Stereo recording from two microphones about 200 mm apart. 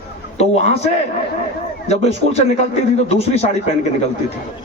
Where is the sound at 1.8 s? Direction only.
30° left (ahead or behind).